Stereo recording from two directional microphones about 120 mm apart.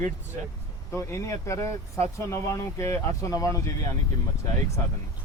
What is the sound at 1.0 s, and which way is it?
Speech, 25° left (ahead or behind).